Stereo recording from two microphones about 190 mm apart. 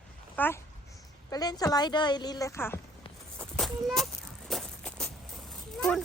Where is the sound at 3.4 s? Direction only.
Centre (ahead or behind).